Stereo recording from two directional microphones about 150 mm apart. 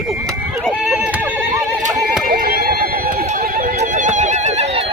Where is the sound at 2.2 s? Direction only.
85° right.